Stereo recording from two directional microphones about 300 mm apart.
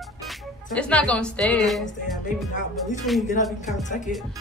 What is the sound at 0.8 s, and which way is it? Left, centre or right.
A woman's voice, centre.